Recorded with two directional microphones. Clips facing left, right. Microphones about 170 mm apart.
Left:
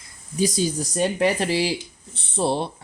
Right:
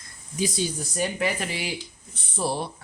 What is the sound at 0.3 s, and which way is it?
Speech, 40° left (ahead or behind).